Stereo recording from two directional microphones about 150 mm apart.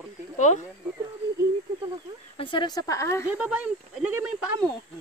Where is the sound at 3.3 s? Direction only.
10° right (ahead or behind).